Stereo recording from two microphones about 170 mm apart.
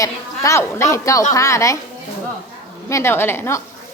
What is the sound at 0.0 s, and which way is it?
A woman's voice, 20° left (ahead or behind).